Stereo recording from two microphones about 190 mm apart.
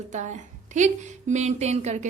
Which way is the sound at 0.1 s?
40° right (ahead or behind).